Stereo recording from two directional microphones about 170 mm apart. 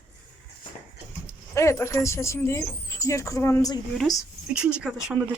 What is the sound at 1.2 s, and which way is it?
Speech, 15° left (ahead or behind).